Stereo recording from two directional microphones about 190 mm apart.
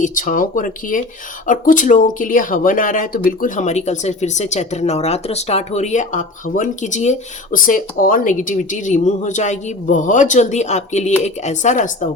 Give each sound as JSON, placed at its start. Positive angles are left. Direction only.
{"t": 0.0, "sound": "speech", "side_deg": 45}